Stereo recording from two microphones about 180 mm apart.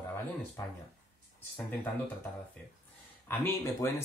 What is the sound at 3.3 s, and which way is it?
Speech, 15° left (ahead or behind).